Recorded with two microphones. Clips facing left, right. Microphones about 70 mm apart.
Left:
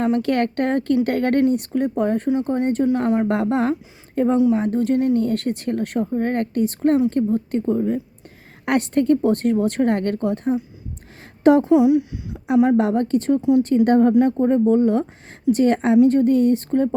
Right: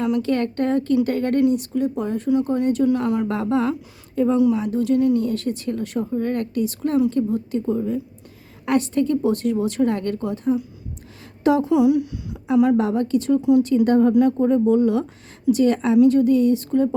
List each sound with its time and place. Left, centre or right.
0.2 s speech: left
2.3 s speech: left
3.2 s speech: left
4.4 s speech: left
11.6 s speech: left
12.7 s speech: left
14.1 s speech: left